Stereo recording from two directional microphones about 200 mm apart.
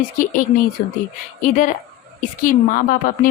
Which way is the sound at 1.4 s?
40° left (ahead or behind).